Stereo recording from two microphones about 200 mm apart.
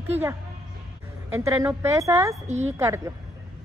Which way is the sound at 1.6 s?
10° right (ahead or behind).